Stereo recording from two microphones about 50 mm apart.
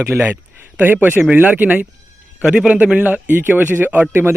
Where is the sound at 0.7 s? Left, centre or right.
Right.